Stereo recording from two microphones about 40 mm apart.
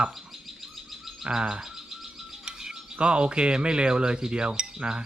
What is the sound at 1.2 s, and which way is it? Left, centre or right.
Bird, centre.